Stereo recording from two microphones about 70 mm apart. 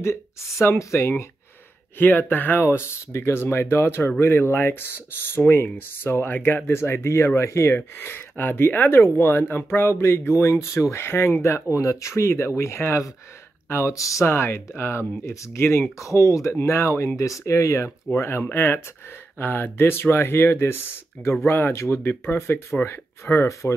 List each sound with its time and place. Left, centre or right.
0.0 s speech: left
2.0 s speech: left
11.7 s speech: left
14.2 s speech: left